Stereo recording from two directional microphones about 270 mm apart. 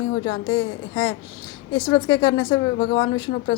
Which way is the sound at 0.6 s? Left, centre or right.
Left.